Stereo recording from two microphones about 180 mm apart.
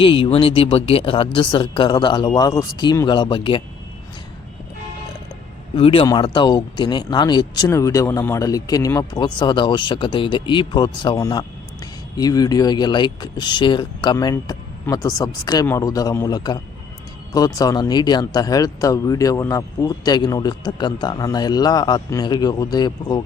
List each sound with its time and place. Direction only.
0.0 s speech: 30° left (ahead or behind)
5.7 s speech: 30° left (ahead or behind)